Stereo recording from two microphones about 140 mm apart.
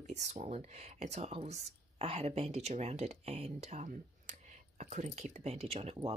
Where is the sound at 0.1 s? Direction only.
55° right (ahead or behind).